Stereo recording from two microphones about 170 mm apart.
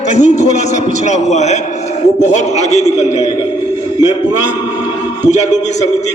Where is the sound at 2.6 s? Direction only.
40° left (ahead or behind).